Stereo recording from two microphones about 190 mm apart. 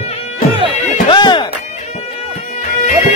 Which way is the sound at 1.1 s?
25° left (ahead or behind).